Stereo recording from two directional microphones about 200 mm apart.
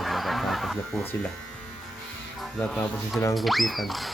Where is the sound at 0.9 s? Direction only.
10° left (ahead or behind).